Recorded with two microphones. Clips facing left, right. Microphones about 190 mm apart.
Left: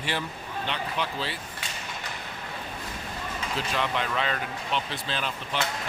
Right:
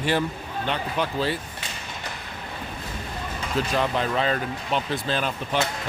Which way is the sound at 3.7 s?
40° right (ahead or behind).